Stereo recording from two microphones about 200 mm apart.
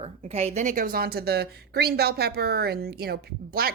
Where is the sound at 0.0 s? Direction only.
30° right (ahead or behind).